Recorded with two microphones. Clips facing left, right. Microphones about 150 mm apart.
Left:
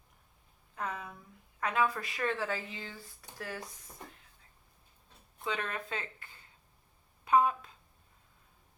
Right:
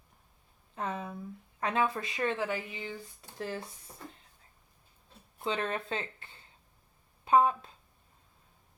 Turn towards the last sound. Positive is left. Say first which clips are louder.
# right 2 dB
turn(degrees=-30)  # may be behind; listen again after turning